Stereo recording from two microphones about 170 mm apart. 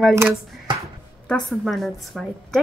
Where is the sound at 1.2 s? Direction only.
5° left (ahead or behind).